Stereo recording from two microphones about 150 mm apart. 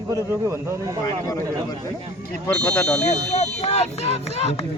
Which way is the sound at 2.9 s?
50° left (ahead or behind).